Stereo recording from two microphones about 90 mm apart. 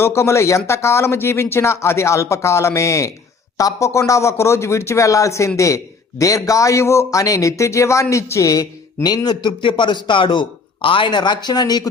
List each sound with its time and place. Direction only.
0.0 s a man's voice: 30° left (ahead or behind); by 11.9 s 50° left (ahead or behind)